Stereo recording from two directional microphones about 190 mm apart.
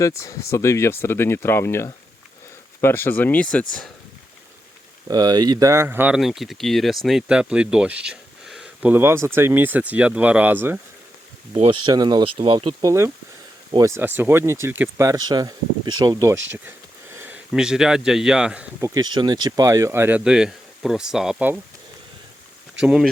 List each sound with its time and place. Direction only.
0.2 s speech: 15° left (ahead or behind)
5.0 s speech: 20° right (ahead or behind)
11.5 s speech: 30° right (ahead or behind); by 18.9 s 5° right (ahead or behind)
18.9 s speech: 20° right (ahead or behind); by 21.6 s 5° right (ahead or behind)
22.8 s speech: 5° right (ahead or behind)